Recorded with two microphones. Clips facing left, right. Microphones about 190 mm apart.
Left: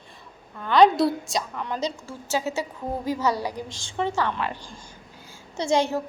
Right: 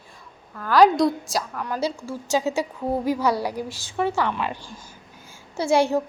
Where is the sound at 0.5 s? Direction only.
Centre (ahead or behind).